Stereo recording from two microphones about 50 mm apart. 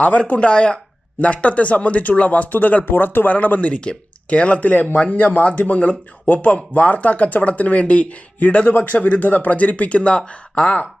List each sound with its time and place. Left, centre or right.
0.0 s speech: left
2.9 s speech: left
3.3 s speech: left